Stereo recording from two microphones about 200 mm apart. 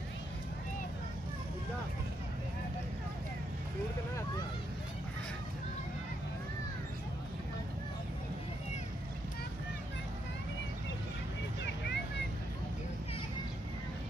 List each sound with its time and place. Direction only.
11.6 s vehicle: 60° left (ahead or behind)